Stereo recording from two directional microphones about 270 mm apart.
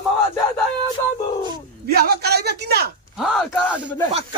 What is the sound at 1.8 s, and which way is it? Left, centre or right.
A man's voice, right.